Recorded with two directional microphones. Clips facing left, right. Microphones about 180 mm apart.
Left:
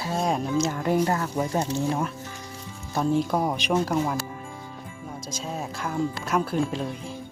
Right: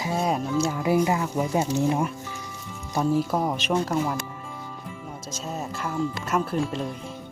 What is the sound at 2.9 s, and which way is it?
Speech, 5° right (ahead or behind).